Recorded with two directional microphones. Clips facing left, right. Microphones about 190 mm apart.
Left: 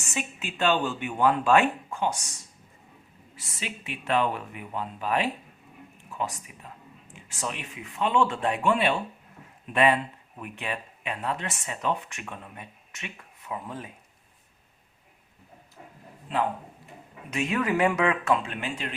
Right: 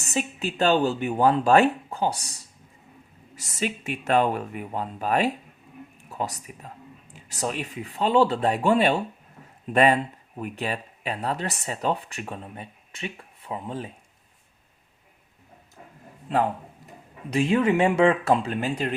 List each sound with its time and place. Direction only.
0.0 s speech: 35° right (ahead or behind)
17.3 s speech: 30° right (ahead or behind)